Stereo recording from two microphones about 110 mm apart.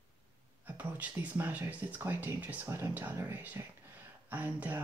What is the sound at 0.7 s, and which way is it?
Speech, 15° right (ahead or behind).